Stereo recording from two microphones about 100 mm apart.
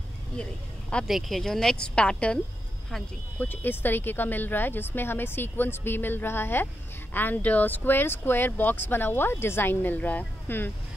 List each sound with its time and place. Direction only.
0.4 s speech: 10° left (ahead or behind)